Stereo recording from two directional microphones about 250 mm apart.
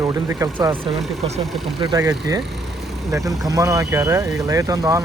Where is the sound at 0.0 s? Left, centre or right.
Centre.